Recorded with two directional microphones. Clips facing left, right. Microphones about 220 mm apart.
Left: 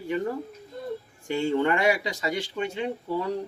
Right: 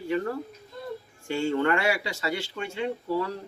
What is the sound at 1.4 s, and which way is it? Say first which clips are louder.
Speech: left 1 dB; 15° left (ahead or behind).